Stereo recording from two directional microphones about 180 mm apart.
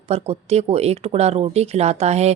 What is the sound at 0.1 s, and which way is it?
Speech, 35° right (ahead or behind).